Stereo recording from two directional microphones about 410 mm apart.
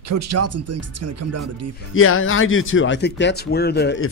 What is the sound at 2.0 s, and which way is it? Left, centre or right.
Speech, left.